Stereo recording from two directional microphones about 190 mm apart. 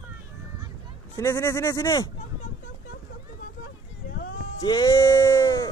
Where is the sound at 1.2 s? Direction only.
15° left (ahead or behind).